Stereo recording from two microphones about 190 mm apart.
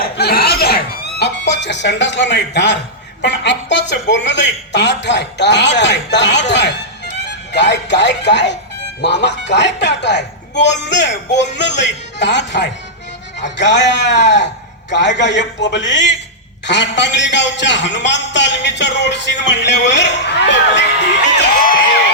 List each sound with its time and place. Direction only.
0.0 s chuckle: 55° left (ahead or behind)
3.2 s a man's voice: 65° left (ahead or behind)